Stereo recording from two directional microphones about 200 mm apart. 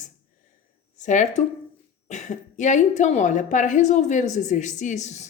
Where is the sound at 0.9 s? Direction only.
40° left (ahead or behind).